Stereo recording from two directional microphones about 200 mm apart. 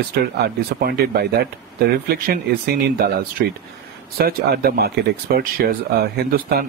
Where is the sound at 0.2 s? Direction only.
55° right (ahead or behind).